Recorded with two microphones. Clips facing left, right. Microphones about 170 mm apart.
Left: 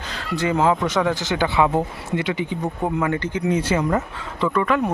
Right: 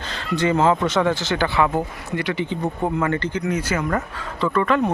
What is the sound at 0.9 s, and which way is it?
Speech, 15° left (ahead or behind).